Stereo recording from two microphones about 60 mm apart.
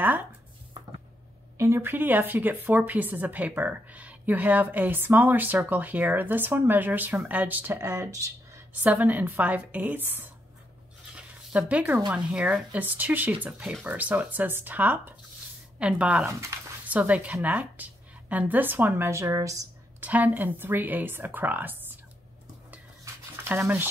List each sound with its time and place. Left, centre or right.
1.8 s speech: right
8.7 s speech: right
11.1 s a sound: right
12.3 s speech: centre
15.8 s speech: centre
16.3 s speech: right
16.8 s speech: right
19.0 s a woman's voice: right
20.0 s speech: right
23.4 s a sound: right